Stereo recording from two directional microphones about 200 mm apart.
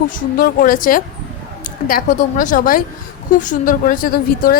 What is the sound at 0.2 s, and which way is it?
A woman's voice, 45° left (ahead or behind).